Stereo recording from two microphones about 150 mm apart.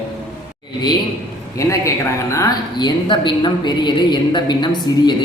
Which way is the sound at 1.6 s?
20° left (ahead or behind).